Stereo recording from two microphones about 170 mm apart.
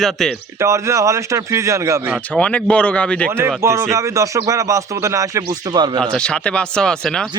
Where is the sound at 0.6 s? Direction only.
15° right (ahead or behind).